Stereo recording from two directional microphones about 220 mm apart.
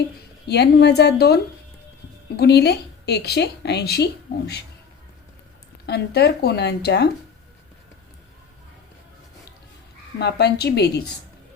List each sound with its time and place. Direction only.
0.4 s a woman's voice: 50° left (ahead or behind)
5.8 s a woman's voice: 50° left (ahead or behind)
10.2 s a woman's voice: 50° left (ahead or behind)